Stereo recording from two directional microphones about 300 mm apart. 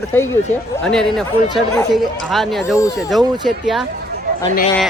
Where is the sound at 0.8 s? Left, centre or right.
Centre.